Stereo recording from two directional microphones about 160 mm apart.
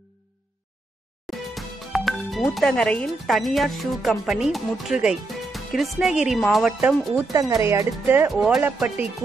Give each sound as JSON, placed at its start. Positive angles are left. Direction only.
{"t": 1.3, "sound": "music", "side_deg": 0}
{"t": 2.5, "sound": "speech", "side_deg": 5}
{"t": 7.3, "sound": "speech", "side_deg": -20}
{"t": 8.3, "sound": "speech", "side_deg": 0}